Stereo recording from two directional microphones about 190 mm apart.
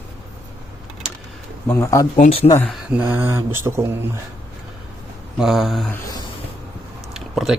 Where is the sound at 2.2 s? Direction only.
30° left (ahead or behind).